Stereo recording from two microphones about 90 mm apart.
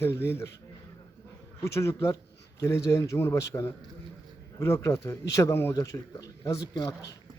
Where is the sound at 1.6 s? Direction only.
30° left (ahead or behind).